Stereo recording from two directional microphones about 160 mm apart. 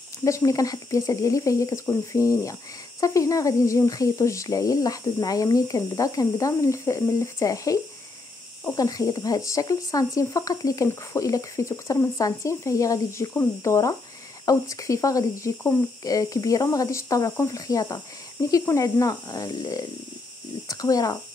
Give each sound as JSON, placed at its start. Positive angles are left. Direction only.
{"t": 0.2, "sound": "speech", "side_deg": 20}